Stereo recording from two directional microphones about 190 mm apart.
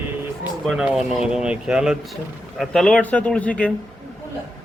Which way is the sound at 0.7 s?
5° right (ahead or behind).